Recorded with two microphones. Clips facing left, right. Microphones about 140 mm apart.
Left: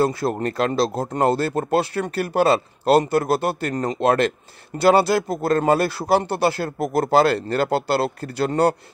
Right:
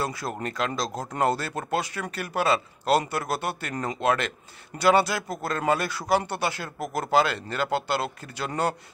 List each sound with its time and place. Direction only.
0.0 s speech: 30° left (ahead or behind)
4.8 s speech: 30° left (ahead or behind)
5.3 s speech: 50° left (ahead or behind); by 8.7 s 35° left (ahead or behind)